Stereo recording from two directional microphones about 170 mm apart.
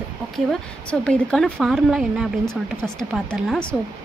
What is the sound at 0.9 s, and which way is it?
Speech, 5° left (ahead or behind).